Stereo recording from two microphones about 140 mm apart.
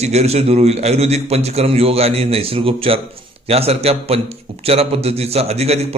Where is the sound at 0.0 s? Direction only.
50° right (ahead or behind).